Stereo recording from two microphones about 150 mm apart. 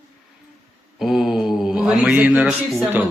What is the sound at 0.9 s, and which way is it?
Speech, centre (ahead or behind).